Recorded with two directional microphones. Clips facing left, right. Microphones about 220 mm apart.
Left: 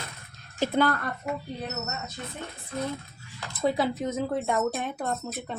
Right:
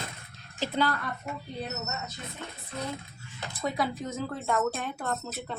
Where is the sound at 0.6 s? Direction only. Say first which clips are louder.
Left 4 dB; 50° left (ahead or behind).